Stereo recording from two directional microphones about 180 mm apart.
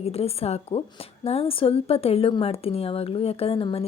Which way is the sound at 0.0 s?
35° left (ahead or behind).